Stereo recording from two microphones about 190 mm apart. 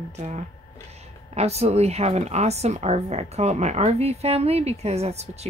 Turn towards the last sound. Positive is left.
turn(degrees=-35)  # may be behind; listen again after turning